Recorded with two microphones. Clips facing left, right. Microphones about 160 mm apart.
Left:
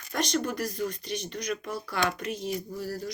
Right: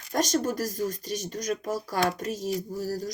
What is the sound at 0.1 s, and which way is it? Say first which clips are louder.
Speech: right 3 dB; 45° right (ahead or behind).